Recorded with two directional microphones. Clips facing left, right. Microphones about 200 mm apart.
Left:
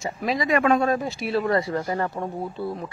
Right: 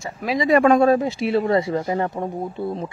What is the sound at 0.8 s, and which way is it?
Speech, 25° right (ahead or behind).